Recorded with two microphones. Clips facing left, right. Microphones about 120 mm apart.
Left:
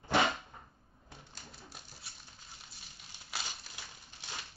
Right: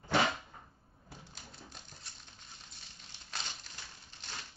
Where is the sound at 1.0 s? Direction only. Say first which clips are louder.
Right 1 dB; centre (ahead or behind).